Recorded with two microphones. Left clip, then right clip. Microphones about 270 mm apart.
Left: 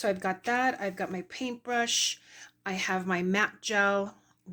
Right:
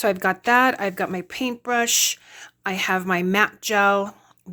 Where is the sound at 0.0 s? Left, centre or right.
Right.